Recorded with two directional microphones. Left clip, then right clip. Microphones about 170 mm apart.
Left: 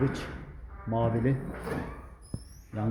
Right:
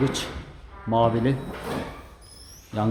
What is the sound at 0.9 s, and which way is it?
Speech, 15° right (ahead or behind).